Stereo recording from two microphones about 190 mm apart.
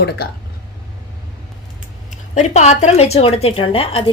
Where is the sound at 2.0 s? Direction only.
40° left (ahead or behind).